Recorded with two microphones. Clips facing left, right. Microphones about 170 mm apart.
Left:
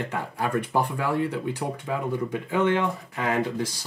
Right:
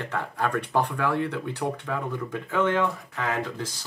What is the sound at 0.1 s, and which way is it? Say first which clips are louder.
Speech: right 3 dB; 10° left (ahead or behind).